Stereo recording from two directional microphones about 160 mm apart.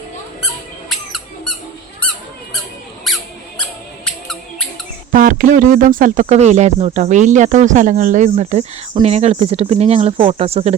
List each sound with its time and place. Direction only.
0.9 s a sound: centre (ahead or behind)
3.1 s squeak: centre (ahead or behind)
5.1 s speech: 55° right (ahead or behind); by 10.8 s 40° right (ahead or behind)